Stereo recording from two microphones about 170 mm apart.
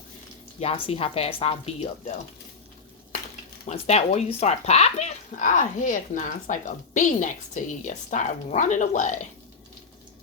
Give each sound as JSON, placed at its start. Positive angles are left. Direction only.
{"t": 0.6, "sound": "speech", "side_deg": 35}
{"t": 3.7, "sound": "speech", "side_deg": 40}